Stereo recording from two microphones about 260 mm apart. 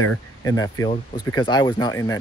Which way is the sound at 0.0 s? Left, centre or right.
Centre.